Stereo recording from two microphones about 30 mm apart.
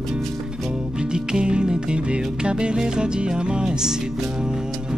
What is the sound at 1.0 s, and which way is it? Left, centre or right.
Music, right.